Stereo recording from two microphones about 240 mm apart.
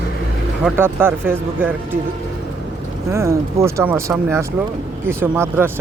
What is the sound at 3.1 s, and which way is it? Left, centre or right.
Speech, centre.